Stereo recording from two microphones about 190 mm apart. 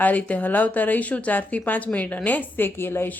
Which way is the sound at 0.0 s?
10° left (ahead or behind).